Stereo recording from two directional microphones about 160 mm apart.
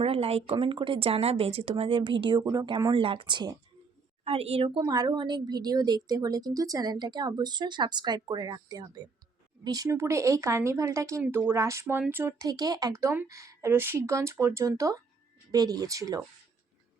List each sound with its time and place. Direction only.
0.0 s speech: 35° right (ahead or behind)
4.2 s speech: 40° right (ahead or behind); by 16.2 s 20° right (ahead or behind)